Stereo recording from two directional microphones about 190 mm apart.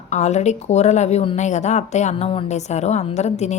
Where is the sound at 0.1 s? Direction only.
35° left (ahead or behind).